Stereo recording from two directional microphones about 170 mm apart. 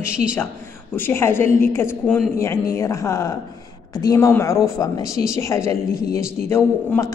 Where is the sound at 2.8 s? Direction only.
20° left (ahead or behind).